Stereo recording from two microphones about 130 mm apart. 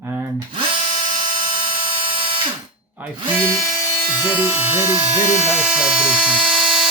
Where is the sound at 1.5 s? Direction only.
40° right (ahead or behind).